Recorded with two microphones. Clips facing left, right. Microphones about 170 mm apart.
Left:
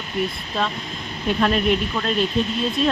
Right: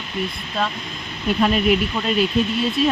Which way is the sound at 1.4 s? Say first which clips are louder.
Right 2 dB; 5° right (ahead or behind).